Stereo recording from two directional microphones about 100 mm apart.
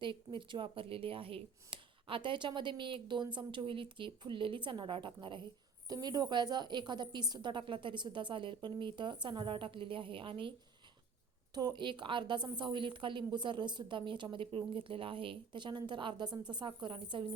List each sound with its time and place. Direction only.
0.0 s speech: 60° right (ahead or behind)
5.9 s a woman's voice: 40° right (ahead or behind); by 10.5 s 60° right (ahead or behind)
11.5 s a woman's voice: 45° right (ahead or behind)